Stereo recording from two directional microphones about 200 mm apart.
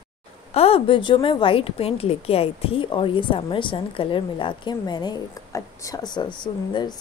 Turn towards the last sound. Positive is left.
turn(degrees=20)  # may be behind; listen again after turning